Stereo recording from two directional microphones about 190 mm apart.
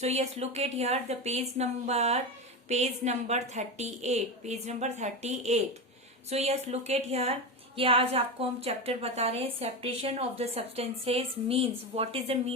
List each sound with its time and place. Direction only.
0.0 s a woman's voice: 35° right (ahead or behind)